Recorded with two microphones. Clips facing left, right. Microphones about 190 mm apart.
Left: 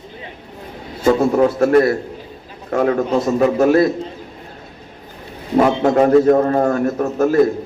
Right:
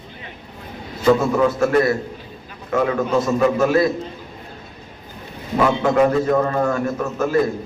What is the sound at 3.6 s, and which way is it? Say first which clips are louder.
Speech: left 5 dB; 50° left (ahead or behind).